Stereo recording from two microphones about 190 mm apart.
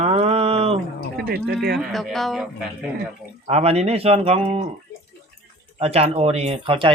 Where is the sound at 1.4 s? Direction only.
55° right (ahead or behind).